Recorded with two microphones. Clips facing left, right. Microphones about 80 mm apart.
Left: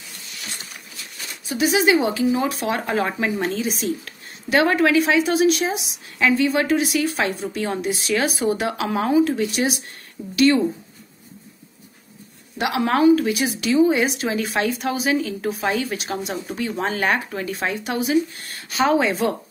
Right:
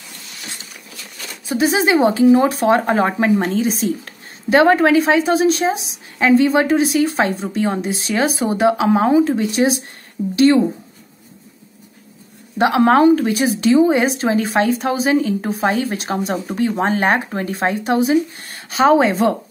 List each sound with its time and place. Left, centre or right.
1.5 s a woman's voice: right
12.5 s a woman's voice: right